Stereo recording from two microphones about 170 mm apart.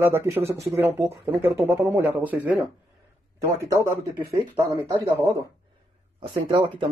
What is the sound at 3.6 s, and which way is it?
Speech, 15° right (ahead or behind).